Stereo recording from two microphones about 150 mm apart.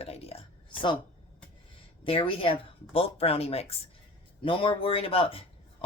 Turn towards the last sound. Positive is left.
turn(degrees=40)  # may be behind; listen again after turning